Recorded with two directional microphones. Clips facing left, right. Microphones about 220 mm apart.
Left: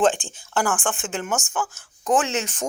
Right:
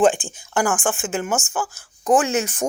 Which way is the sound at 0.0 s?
10° right (ahead or behind).